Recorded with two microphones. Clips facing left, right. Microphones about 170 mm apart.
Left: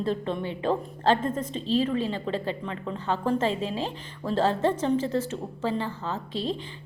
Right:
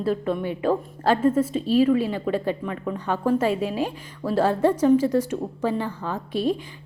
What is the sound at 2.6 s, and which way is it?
Speech, 25° left (ahead or behind).